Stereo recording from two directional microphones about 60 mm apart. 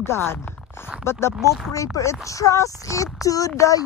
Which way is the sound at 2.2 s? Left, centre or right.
Left.